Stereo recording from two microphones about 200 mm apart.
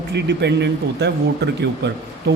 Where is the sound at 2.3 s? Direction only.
55° right (ahead or behind).